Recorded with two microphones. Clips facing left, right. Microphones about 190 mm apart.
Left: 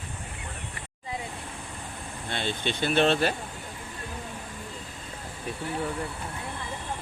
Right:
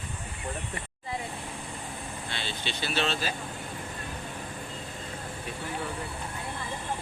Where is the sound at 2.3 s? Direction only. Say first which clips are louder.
Left 8 dB; 50° left (ahead or behind).